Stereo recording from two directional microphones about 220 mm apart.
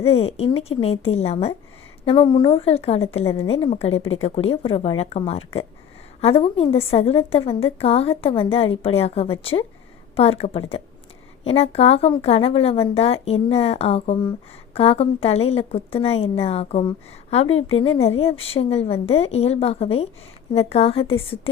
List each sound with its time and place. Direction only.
0.0 s a woman's voice: 25° left (ahead or behind)